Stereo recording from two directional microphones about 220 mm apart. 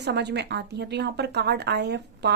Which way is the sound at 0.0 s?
50° right (ahead or behind).